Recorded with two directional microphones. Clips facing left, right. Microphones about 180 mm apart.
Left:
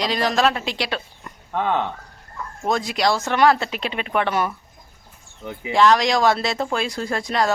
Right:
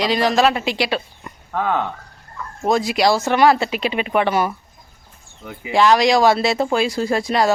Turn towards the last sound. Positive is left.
turn(degrees=-5)  # may be behind; listen again after turning